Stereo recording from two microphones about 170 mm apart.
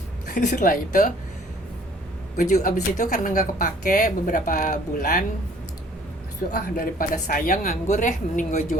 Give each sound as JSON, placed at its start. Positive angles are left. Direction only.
{"t": 0.3, "sound": "speech", "side_deg": 50}
{"t": 2.3, "sound": "a woman's voice", "side_deg": 50}
{"t": 6.5, "sound": "a woman's voice", "side_deg": 55}